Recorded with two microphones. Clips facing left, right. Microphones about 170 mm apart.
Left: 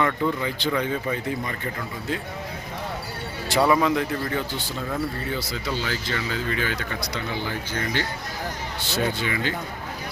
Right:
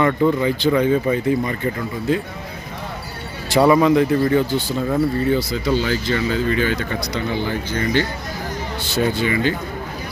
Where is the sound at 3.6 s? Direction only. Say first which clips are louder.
Right 6 dB; 15° right (ahead or behind).